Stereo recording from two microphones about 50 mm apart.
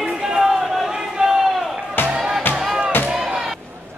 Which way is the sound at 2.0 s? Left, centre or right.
Centre.